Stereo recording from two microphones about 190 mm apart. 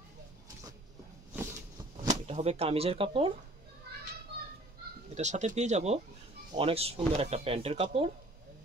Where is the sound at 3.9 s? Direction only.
55° right (ahead or behind).